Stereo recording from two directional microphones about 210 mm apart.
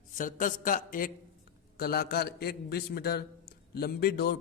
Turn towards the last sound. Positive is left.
turn(degrees=50)  # may be behind; listen again after turning